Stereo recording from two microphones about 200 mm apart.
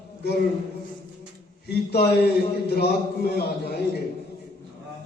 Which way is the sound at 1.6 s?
55° left (ahead or behind).